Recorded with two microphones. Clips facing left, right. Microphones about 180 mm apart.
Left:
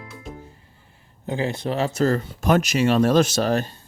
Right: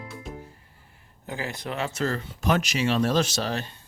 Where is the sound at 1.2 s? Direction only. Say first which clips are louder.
Left 8 dB; 25° left (ahead or behind); by 3.7 s 50° left (ahead or behind).